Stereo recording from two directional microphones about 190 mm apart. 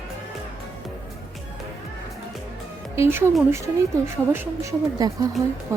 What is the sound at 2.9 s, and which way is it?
Speech, 15° right (ahead or behind).